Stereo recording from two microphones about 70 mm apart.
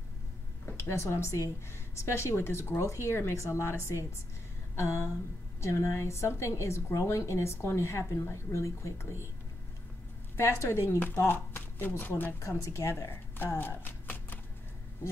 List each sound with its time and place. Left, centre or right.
0.8 s a woman's voice: left
10.3 s a woman's voice: left
13.6 s chopping: left